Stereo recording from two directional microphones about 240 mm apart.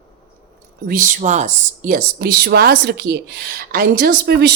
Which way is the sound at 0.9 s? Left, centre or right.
Right.